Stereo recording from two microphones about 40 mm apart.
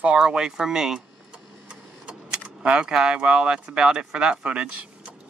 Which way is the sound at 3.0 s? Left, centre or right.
Right.